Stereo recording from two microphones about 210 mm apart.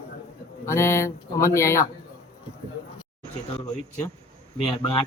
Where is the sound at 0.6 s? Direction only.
15° left (ahead or behind).